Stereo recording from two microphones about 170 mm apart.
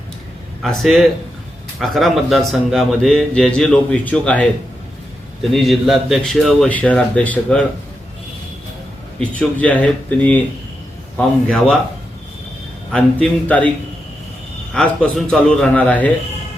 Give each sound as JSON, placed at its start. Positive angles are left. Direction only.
{"t": 0.6, "sound": "a man's voice", "side_deg": 0}
{"t": 9.3, "sound": "a man's voice", "side_deg": 10}
{"t": 11.4, "sound": "a man's voice", "side_deg": 5}
{"t": 12.9, "sound": "a man's voice", "side_deg": 5}
{"t": 14.7, "sound": "a man's voice", "side_deg": 5}